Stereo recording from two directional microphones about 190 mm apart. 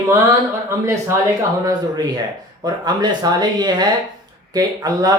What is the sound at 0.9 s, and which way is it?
A man's voice, 15° right (ahead or behind).